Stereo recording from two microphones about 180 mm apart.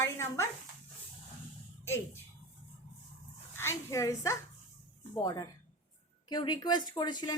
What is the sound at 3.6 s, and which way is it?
A woman's voice, 15° left (ahead or behind).